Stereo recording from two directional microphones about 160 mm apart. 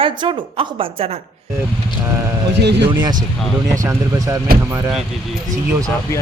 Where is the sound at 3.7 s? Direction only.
15° right (ahead or behind).